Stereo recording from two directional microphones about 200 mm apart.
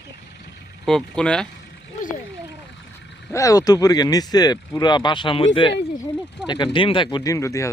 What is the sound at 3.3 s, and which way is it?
Speech, 15° left (ahead or behind).